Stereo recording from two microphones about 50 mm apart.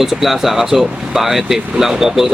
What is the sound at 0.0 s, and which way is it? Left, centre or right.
Speech, centre.